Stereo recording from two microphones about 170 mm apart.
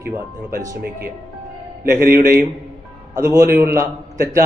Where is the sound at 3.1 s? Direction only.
20° right (ahead or behind).